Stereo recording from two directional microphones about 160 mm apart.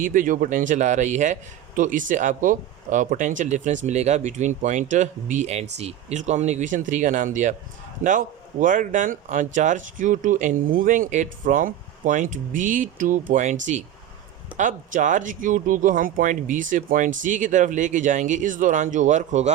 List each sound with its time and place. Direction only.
0.0 s speech: 55° right (ahead or behind)